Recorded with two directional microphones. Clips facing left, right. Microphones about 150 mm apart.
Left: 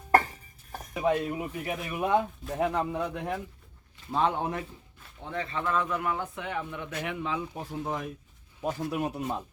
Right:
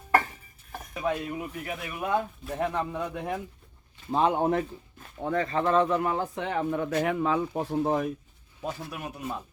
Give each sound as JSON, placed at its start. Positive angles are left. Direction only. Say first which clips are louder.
{"t": 1.3, "sound": "speech", "louder": "left 1 dB", "side_deg": 20}
{"t": 2.4, "sound": "a man's voice", "louder": "left 1 dB", "side_deg": -5}
{"t": 4.1, "sound": "a man's voice", "louder": "right 3 dB", "side_deg": -25}
{"t": 4.4, "sound": "speech", "louder": "right 7 dB", "side_deg": -50}
{"t": 8.6, "sound": "speech", "louder": "left 4 dB", "side_deg": 15}
{"t": 9.0, "sound": "speech", "louder": "left 5 dB", "side_deg": 30}